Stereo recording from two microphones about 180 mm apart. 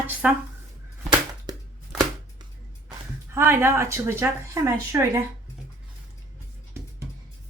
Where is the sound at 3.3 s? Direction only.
10° right (ahead or behind).